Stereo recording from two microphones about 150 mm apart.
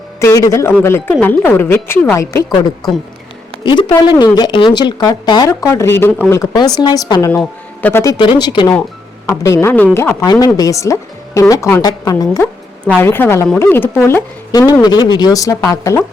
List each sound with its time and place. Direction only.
0.2 s speech: 20° left (ahead or behind)
3.6 s speech: 30° left (ahead or behind)
7.3 s a man's voice: 10° left (ahead or behind)
8.0 s speech: 30° left (ahead or behind)
14.8 s speech: 25° left (ahead or behind)